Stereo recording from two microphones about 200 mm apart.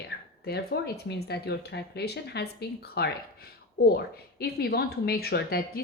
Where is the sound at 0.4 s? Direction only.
55° left (ahead or behind).